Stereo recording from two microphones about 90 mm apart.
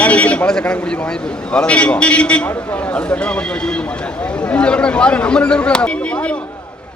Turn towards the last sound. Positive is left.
turn(degrees=15)  # may be behind; listen again after turning